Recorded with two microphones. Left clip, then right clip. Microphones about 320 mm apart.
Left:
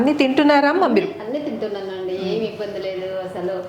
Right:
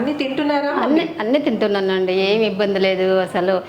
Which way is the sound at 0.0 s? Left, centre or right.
Left.